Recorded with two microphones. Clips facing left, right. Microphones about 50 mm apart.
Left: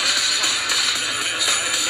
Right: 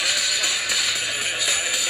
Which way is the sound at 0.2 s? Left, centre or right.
Left.